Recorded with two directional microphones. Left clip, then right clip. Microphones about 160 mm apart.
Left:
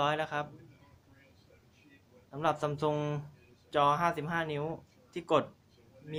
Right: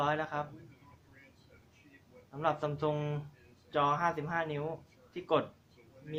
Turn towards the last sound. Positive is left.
turn(degrees=50)  # may be behind; listen again after turning